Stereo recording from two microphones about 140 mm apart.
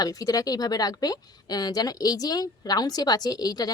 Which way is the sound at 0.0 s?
25° left (ahead or behind).